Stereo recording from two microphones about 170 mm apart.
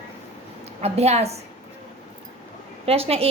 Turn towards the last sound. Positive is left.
turn(degrees=-35)  # may be behind; listen again after turning